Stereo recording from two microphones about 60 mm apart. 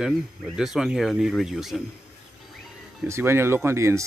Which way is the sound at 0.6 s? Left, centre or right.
Centre.